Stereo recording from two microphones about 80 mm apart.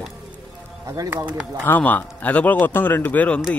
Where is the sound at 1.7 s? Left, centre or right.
Left.